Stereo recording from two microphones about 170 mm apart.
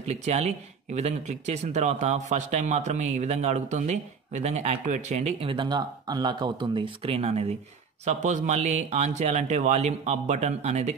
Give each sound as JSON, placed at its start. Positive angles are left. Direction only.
{"t": 0.0, "sound": "speech", "side_deg": -40}